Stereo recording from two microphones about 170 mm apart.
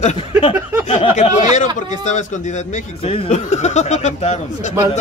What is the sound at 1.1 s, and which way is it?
A man's voice, 45° left (ahead or behind).